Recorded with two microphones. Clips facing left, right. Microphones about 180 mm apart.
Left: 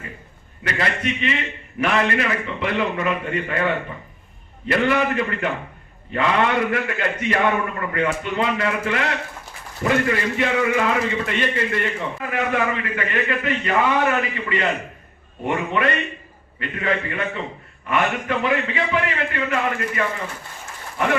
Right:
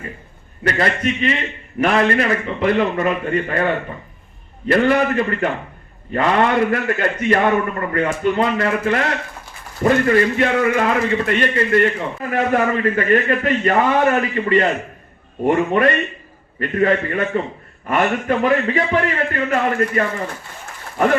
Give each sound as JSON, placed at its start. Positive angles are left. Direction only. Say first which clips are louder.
{"t": 0.6, "sound": "a man's voice", "louder": "right 5 dB", "side_deg": -45}